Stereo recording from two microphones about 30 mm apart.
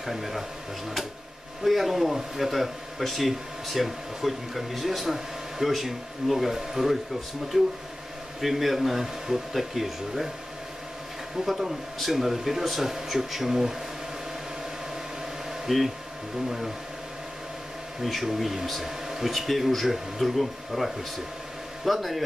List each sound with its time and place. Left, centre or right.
0.0 s speech: centre
1.6 s speech: centre
8.4 s speech: centre
11.4 s speech: centre
15.6 s speech: centre
18.0 s speech: centre
19.0 s a sound: centre
19.3 s speech: centre